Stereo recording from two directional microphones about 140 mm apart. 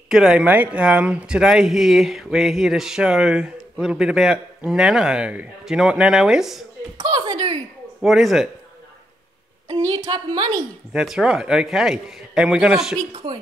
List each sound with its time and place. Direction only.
0.1 s speech: 5° right (ahead or behind)
7.0 s a sound: 30° right (ahead or behind)
8.0 s speech: centre (ahead or behind)
9.7 s a woman's voice: 25° right (ahead or behind)
10.9 s speech: 5° right (ahead or behind)
13.1 s speech: 35° right (ahead or behind)